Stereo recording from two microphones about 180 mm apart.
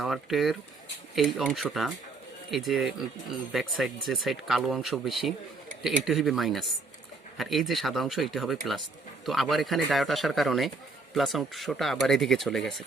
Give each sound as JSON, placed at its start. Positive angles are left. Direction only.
{"t": 0.0, "sound": "speech", "side_deg": 0}